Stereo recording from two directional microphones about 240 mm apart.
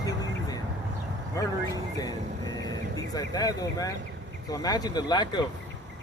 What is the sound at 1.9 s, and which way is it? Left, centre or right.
Vehicle, centre.